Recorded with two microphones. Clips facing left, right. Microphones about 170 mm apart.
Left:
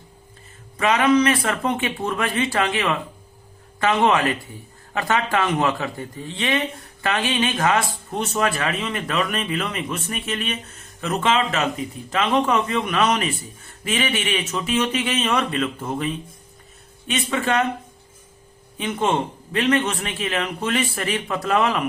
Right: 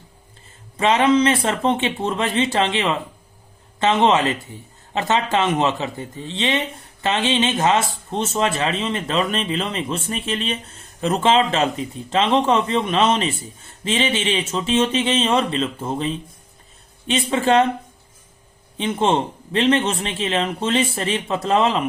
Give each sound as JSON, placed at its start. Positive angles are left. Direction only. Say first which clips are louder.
{"t": 0.8, "sound": "speech", "louder": "right 1 dB", "side_deg": -25}
{"t": 18.8, "sound": "speech", "louder": "right 3 dB", "side_deg": -30}